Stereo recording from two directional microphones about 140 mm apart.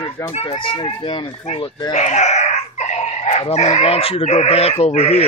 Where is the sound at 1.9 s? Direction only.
55° left (ahead or behind).